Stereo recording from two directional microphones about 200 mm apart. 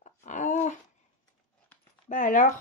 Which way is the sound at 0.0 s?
35° left (ahead or behind).